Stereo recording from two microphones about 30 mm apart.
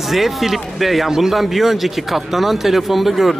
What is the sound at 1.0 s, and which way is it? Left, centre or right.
Speech, centre.